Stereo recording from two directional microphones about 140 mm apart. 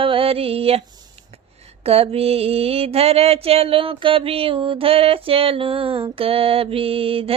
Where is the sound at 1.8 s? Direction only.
45° right (ahead or behind).